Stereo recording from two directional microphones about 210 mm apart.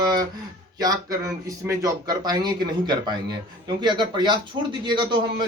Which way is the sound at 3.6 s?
20° right (ahead or behind).